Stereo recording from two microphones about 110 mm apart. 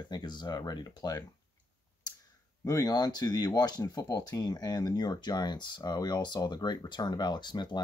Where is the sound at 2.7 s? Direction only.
35° left (ahead or behind).